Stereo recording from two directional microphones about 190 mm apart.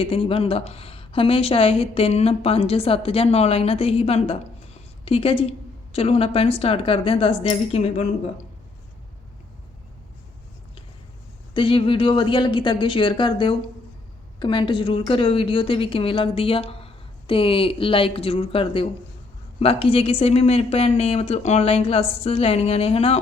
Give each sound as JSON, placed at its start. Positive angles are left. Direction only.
{"t": 0.0, "sound": "a woman's voice", "side_deg": 30}
{"t": 11.5, "sound": "a woman's voice", "side_deg": 25}